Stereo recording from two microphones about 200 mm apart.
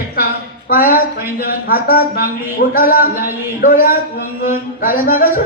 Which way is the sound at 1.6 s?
45° left (ahead or behind).